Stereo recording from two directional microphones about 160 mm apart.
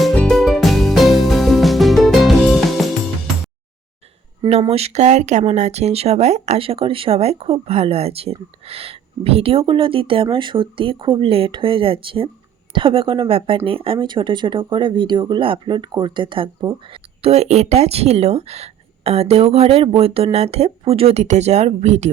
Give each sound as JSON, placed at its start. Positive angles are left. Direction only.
{"t": 0.0, "sound": "music", "side_deg": 5}
{"t": 4.7, "sound": "speech", "side_deg": -40}
{"t": 17.2, "sound": "speech", "side_deg": -40}